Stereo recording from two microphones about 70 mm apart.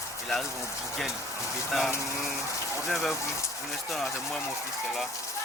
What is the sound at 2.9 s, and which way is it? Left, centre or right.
Speech, centre.